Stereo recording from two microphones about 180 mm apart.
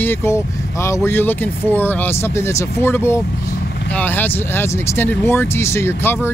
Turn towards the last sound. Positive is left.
turn(degrees=15)  # may be behind; listen again after turning